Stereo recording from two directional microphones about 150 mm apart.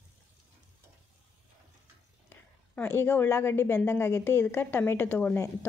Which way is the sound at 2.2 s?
15° left (ahead or behind).